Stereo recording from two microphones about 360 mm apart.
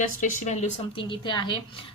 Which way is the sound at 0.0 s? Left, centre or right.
Left.